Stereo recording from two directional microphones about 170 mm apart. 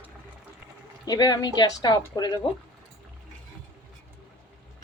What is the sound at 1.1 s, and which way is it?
A woman's voice, 25° left (ahead or behind).